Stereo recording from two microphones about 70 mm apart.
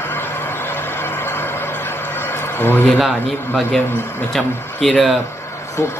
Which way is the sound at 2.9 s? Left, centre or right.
Centre.